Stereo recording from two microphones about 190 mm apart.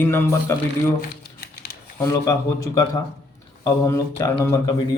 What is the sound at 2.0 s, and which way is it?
A man's voice, 15° left (ahead or behind).